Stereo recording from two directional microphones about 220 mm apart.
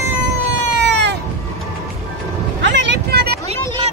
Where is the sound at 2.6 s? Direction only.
55° right (ahead or behind).